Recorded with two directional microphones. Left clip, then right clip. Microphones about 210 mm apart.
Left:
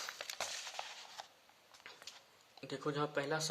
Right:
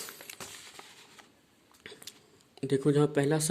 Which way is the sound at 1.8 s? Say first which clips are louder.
Right 6 dB; 35° right (ahead or behind).